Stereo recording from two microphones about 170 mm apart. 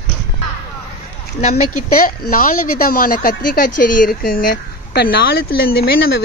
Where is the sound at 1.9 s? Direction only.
55° left (ahead or behind).